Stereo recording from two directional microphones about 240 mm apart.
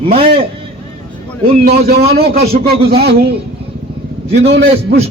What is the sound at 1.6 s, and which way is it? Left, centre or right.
Speech, right.